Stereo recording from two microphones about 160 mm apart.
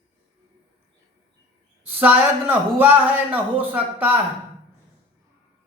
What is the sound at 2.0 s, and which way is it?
A man's voice, 10° right (ahead or behind).